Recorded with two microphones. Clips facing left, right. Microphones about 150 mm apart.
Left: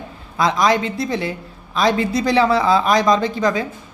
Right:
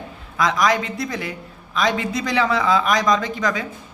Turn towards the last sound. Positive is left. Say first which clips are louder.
# left 4 dB
turn(degrees=30)  # may be behind; listen again after turning